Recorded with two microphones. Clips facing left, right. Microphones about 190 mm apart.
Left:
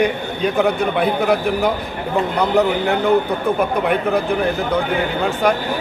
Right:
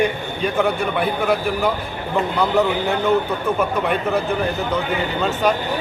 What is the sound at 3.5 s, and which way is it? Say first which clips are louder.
Speech: left 2 dB; 15° left (ahead or behind).